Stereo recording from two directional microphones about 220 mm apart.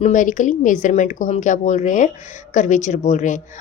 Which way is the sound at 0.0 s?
35° left (ahead or behind).